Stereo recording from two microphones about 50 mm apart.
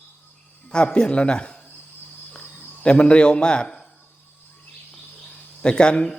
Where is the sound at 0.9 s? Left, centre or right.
Left.